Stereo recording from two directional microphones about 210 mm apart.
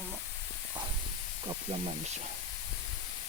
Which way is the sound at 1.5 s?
25° right (ahead or behind).